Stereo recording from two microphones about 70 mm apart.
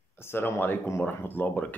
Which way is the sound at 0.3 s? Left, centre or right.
Left.